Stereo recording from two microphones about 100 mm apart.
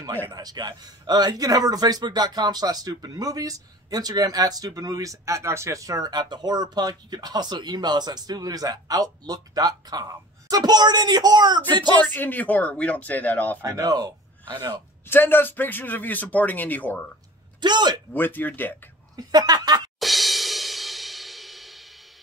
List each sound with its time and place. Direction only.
0.3 s a man's voice: 45° right (ahead or behind)
12.0 s a man's voice: 20° left (ahead or behind)
13.6 s a man's voice: 35° right (ahead or behind)
15.0 s a man's voice: 20° left (ahead or behind)
17.6 s speech: 50° right (ahead or behind)
18.1 s speech: 20° left (ahead or behind)
19.1 s a man's voice: 40° right (ahead or behind)
20.0 s music: centre (ahead or behind)